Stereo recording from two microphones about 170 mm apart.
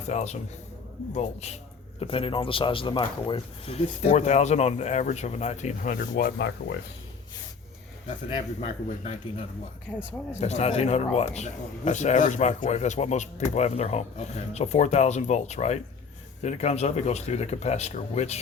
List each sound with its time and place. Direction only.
0.1 s speech: 40° left (ahead or behind); by 6.7 s 70° left (ahead or behind)
8.3 s speech: 30° left (ahead or behind)
10.4 s speech: 40° left (ahead or behind)